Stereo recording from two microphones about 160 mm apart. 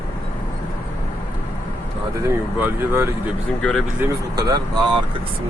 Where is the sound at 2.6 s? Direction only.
15° right (ahead or behind).